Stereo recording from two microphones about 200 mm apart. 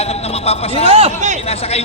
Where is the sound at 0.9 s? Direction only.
30° right (ahead or behind).